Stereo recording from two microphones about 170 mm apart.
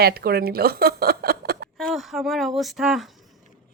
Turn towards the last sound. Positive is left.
turn(degrees=0)  # may be behind; listen again after turning